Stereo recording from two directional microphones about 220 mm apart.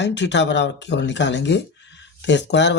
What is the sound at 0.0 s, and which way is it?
Speech, 55° left (ahead or behind).